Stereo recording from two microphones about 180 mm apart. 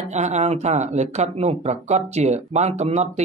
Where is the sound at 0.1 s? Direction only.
40° right (ahead or behind).